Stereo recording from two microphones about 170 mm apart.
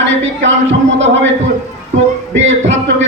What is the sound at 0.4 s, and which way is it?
Speech, 90° right.